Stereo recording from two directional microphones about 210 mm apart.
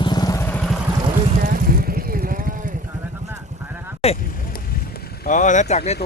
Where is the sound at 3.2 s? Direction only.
10° right (ahead or behind).